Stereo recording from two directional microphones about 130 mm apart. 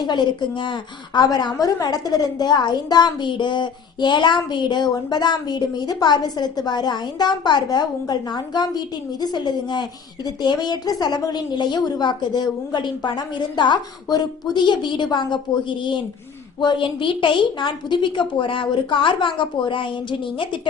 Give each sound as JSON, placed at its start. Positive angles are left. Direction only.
{"t": 0.0, "sound": "a woman's voice", "side_deg": 35}